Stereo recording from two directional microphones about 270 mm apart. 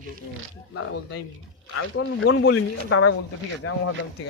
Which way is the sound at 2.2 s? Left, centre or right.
Left.